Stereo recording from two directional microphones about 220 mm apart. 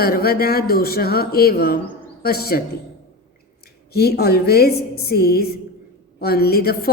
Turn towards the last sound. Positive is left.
turn(degrees=45)  # may be behind; listen again after turning